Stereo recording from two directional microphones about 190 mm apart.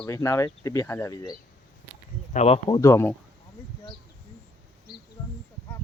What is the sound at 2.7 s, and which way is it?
Speech, 15° left (ahead or behind).